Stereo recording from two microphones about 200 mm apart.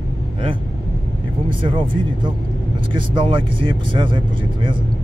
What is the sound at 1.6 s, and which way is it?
Speech, 25° right (ahead or behind).